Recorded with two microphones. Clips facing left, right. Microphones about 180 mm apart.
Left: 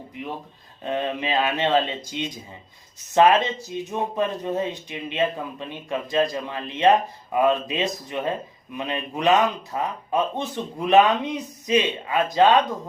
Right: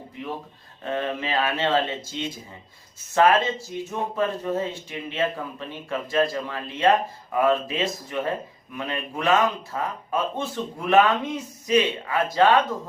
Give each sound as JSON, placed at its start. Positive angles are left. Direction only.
{"t": 0.2, "sound": "speech", "side_deg": 15}